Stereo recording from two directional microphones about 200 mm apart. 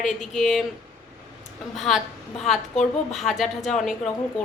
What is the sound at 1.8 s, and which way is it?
Speech, centre (ahead or behind).